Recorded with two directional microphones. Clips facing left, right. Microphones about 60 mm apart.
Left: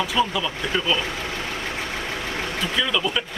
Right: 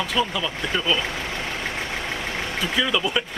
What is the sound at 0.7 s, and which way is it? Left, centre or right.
Speech, centre.